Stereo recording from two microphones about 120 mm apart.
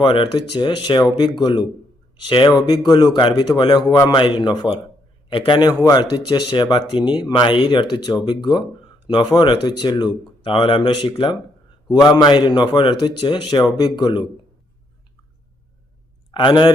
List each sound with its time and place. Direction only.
0.0 s speech: 40° left (ahead or behind)
16.3 s a man's voice: 40° left (ahead or behind)